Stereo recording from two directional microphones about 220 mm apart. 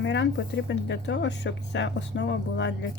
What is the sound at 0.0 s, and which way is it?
Speech, 55° left (ahead or behind).